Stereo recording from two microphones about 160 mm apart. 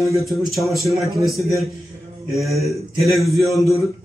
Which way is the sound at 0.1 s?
Centre (ahead or behind).